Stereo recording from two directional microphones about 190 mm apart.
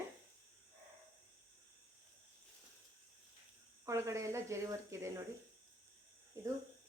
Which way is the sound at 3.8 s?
15° right (ahead or behind).